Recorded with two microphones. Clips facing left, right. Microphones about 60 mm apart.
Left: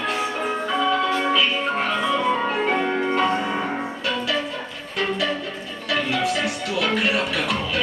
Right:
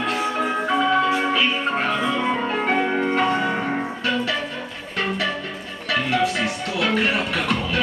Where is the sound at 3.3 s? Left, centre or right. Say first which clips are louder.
Right 2 dB; right.